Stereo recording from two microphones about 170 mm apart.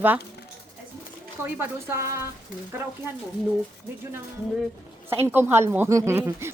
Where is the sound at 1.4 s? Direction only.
15° right (ahead or behind).